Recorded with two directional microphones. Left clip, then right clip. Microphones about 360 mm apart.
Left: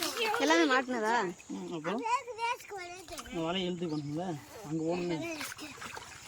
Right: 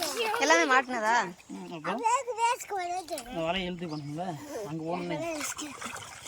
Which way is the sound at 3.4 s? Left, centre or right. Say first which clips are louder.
Right 1 dB; centre.